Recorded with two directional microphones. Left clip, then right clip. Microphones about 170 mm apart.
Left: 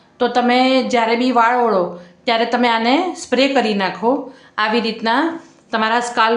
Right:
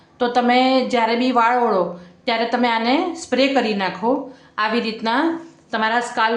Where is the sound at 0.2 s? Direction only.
10° left (ahead or behind).